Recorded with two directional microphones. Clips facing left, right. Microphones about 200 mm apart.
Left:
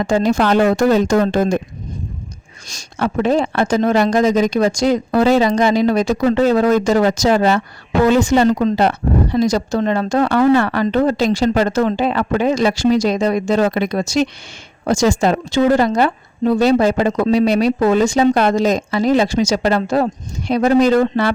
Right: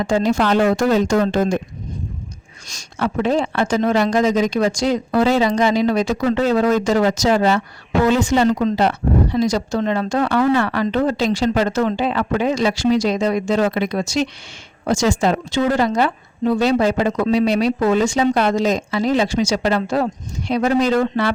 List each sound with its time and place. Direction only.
0.0 s speech: 45° left (ahead or behind)
2.7 s speech: 45° left (ahead or behind)